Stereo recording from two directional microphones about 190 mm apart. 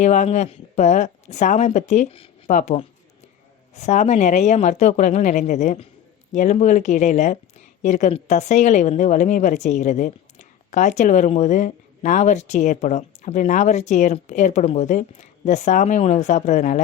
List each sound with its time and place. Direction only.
0.0 s a woman's voice: 40° left (ahead or behind)